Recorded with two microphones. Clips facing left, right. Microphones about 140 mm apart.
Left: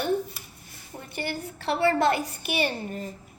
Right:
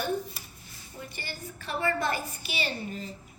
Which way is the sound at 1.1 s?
60° left (ahead or behind).